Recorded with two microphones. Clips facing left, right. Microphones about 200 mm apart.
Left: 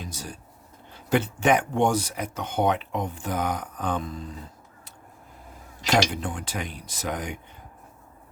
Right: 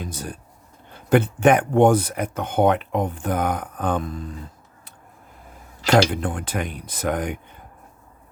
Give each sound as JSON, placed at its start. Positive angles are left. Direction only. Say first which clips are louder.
{"t": 0.0, "sound": "speech", "louder": "right 5 dB", "side_deg": -55}
{"t": 5.8, "sound": "speech", "louder": "right 6 dB", "side_deg": -60}